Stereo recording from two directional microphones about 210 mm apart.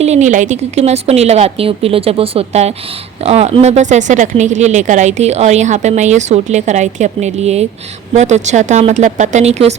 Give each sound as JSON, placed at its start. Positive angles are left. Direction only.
{"t": 0.0, "sound": "a woman's voice", "side_deg": -35}